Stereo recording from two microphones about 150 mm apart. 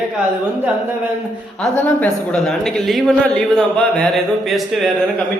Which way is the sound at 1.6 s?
10° left (ahead or behind).